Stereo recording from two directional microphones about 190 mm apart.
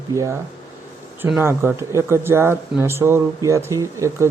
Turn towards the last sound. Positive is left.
turn(degrees=-15)  # may be behind; listen again after turning